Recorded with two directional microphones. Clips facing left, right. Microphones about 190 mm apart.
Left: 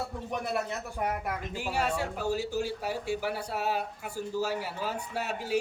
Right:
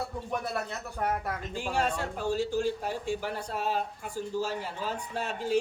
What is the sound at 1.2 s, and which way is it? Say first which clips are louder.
Speech: even; 10° left (ahead or behind).